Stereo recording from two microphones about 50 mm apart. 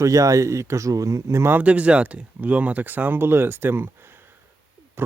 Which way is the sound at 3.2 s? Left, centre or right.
Right.